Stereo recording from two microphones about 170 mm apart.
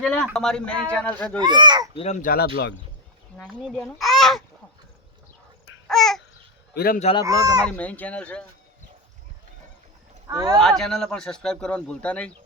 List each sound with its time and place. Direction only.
0.0 s speech: 5° left (ahead or behind)
1.4 s speech: 25° right (ahead or behind)
2.2 s speech: 60° left (ahead or behind)
3.3 s speech: centre (ahead or behind)
5.9 s babbling: centre (ahead or behind)
6.7 s speech: 60° left (ahead or behind)
7.0 s speech: 30° left (ahead or behind)
7.3 s speech: 20° right (ahead or behind)
7.8 s speech: 10° left (ahead or behind)
10.2 s speech: 20° right (ahead or behind)
10.6 s speech: 5° left (ahead or behind)